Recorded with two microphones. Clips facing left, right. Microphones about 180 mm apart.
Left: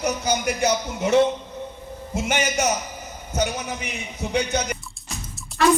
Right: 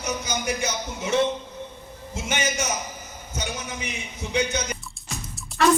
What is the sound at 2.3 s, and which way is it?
Speech, 60° left (ahead or behind).